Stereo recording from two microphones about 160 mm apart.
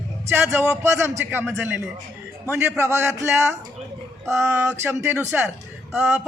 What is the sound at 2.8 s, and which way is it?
Speech, 15° right (ahead or behind).